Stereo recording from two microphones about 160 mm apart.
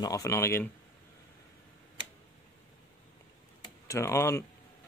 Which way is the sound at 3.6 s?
20° left (ahead or behind).